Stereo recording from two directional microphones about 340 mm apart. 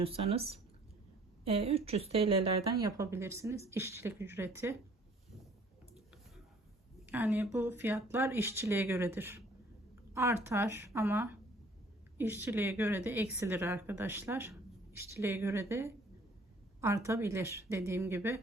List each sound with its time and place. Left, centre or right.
0.0 s speech: centre
7.1 s speech: centre